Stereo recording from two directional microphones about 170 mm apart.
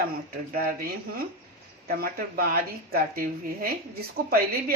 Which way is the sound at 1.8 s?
60° right (ahead or behind).